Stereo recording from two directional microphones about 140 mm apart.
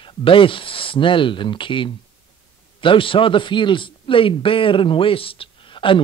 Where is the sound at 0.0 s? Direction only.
40° left (ahead or behind).